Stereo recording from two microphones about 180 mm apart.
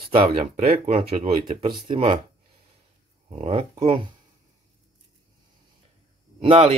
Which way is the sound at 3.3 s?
35° right (ahead or behind).